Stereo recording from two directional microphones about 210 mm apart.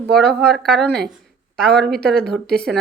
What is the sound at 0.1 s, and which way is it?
Speech, centre (ahead or behind).